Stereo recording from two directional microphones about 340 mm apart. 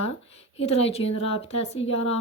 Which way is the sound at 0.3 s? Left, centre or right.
Centre.